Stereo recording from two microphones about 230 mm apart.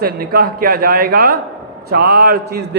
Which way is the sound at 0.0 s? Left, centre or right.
Right.